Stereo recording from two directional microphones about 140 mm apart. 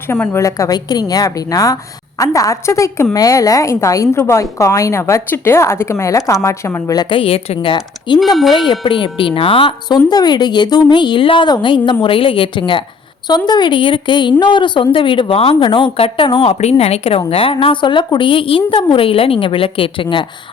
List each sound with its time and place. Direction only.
0.1 s a woman's voice: 20° left (ahead or behind); by 8.2 s 35° left (ahead or behind)
8.2 s speech: centre (ahead or behind)
8.5 s a woman's voice: 35° left (ahead or behind)